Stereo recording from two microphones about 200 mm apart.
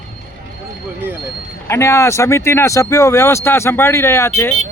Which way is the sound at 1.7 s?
15° left (ahead or behind).